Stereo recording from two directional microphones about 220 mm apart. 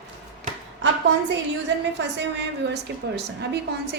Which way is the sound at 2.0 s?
50° right (ahead or behind).